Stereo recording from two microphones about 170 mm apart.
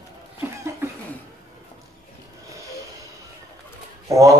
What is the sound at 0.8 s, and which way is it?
Cough, 15° right (ahead or behind).